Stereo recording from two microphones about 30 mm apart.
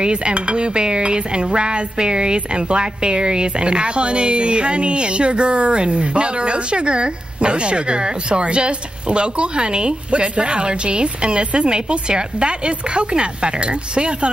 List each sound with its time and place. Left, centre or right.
0.0 s dishes: right